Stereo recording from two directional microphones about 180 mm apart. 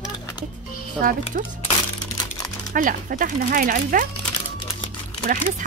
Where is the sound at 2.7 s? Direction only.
45° right (ahead or behind).